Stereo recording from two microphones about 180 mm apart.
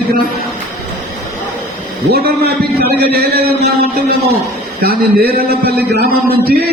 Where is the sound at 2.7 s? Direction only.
60° right (ahead or behind).